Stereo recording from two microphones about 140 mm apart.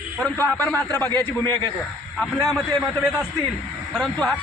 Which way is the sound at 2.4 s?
Centre (ahead or behind).